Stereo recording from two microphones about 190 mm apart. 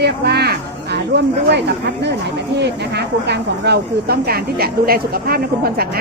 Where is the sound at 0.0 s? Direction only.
60° right (ahead or behind).